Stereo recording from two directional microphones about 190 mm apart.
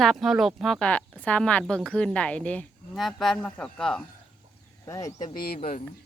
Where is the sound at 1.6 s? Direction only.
5° right (ahead or behind).